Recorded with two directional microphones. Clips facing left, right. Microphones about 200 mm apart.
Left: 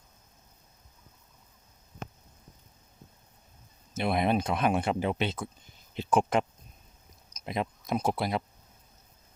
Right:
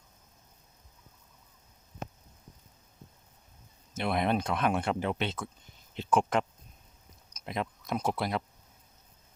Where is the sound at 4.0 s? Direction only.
10° left (ahead or behind).